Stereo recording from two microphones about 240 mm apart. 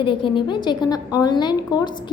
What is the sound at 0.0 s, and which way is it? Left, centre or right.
A woman's voice, left.